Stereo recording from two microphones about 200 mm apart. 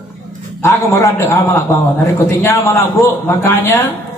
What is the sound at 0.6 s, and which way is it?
A man's voice, 15° left (ahead or behind).